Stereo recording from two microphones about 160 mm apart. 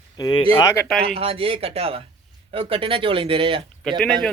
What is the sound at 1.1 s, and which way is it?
Speech, 40° right (ahead or behind).